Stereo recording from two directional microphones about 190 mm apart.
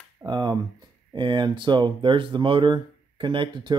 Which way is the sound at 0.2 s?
20° right (ahead or behind).